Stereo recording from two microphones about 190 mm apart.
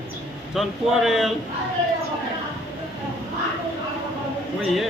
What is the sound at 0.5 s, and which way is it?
Speech, centre (ahead or behind).